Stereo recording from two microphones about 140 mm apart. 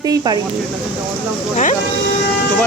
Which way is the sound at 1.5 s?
55° left (ahead or behind).